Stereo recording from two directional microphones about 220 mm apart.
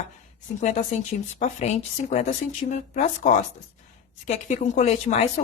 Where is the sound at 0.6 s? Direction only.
35° left (ahead or behind).